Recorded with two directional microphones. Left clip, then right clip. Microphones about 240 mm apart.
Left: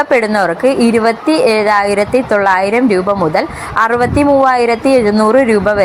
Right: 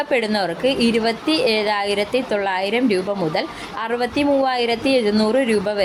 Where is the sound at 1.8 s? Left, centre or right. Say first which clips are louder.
Left 8 dB; centre.